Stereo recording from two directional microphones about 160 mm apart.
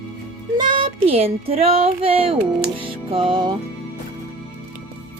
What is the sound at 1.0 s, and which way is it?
Speech, 40° right (ahead or behind).